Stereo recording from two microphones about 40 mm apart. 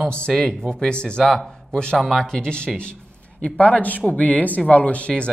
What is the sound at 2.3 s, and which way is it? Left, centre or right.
Speech, left.